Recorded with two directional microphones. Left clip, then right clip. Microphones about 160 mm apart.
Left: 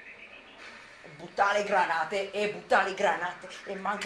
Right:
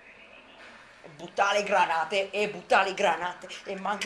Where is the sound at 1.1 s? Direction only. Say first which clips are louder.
Right 1 dB; 55° right (ahead or behind).